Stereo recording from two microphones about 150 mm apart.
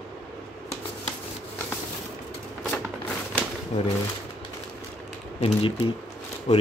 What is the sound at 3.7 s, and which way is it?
Speech, 45° left (ahead or behind).